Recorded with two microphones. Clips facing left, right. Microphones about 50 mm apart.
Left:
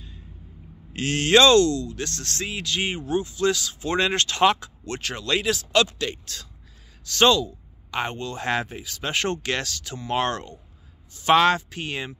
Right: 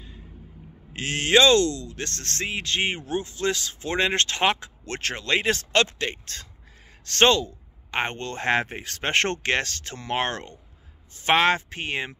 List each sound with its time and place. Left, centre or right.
0.9 s speech: right
5.5 s speech: right
10.1 s speech: right